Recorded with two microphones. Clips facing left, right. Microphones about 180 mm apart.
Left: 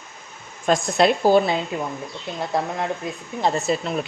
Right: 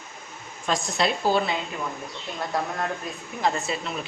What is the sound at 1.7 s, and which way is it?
Speech, 25° left (ahead or behind).